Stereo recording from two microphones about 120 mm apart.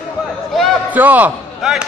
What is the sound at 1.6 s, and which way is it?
Speech, 5° right (ahead or behind).